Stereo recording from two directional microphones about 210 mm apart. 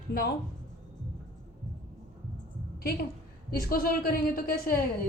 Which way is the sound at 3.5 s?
45° left (ahead or behind).